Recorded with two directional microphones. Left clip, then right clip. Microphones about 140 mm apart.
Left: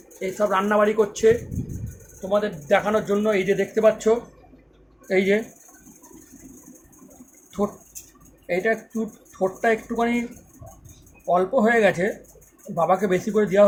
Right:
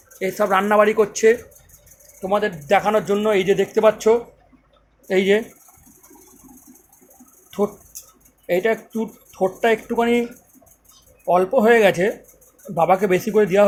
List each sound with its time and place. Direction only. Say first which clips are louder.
0.2 s speech: right 3 dB; 40° right (ahead or behind); by 5.4 s 20° right (ahead or behind)
8.4 s speech: right 3 dB; 25° right (ahead or behind)
11.3 s speech: right 4 dB; 25° right (ahead or behind)